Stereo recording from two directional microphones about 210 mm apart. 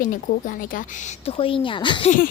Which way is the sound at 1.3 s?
25° left (ahead or behind).